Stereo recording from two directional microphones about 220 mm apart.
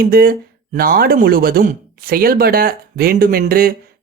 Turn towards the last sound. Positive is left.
turn(degrees=-40)  # may be behind; listen again after turning